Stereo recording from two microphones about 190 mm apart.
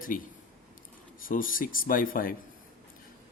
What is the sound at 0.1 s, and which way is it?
Speech, 45° left (ahead or behind).